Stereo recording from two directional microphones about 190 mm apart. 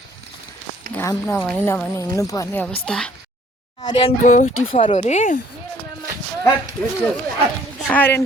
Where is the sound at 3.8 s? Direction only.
25° left (ahead or behind).